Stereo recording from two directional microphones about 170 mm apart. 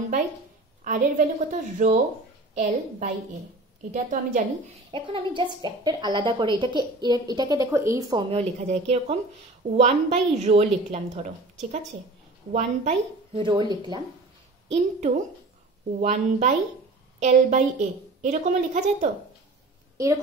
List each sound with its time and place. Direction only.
0.8 s a woman's voice: 45° right (ahead or behind)
4.9 s a woman's voice: 30° right (ahead or behind)
14.7 s a woman's voice: 40° right (ahead or behind)